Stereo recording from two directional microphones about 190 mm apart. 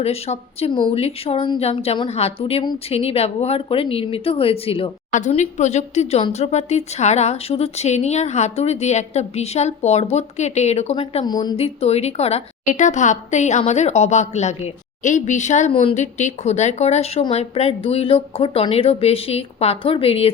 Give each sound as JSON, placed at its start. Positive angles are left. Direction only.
{"t": 0.0, "sound": "speech", "side_deg": 35}